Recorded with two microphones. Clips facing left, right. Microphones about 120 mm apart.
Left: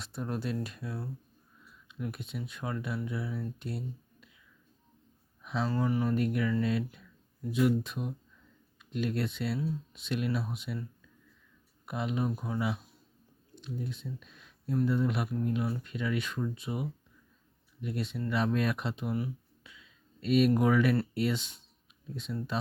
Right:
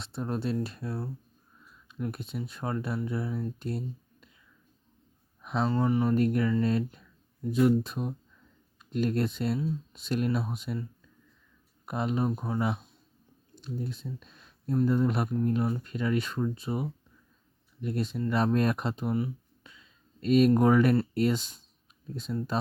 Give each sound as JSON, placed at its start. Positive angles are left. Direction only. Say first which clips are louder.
{"t": 0.0, "sound": "speech", "louder": "right 3 dB", "side_deg": -25}
{"t": 5.6, "sound": "speech", "louder": "right 4 dB", "side_deg": -25}
{"t": 6.1, "sound": "speech", "louder": "right 4 dB", "side_deg": -40}
{"t": 11.9, "sound": "speech", "louder": "right 3 dB", "side_deg": -40}
{"t": 19.1, "sound": "a sound", "louder": "right 4 dB", "side_deg": -30}
{"t": 20.2, "sound": "speech", "louder": "right 4 dB", "side_deg": -40}